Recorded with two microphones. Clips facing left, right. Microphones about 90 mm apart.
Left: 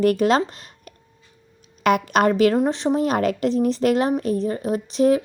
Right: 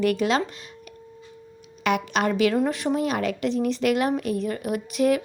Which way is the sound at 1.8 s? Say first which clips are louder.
Left 5 dB; 45° left (ahead or behind).